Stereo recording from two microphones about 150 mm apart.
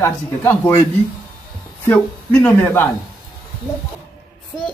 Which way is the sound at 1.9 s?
10° left (ahead or behind).